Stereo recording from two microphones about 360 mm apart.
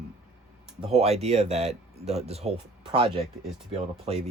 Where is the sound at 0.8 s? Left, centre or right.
Centre.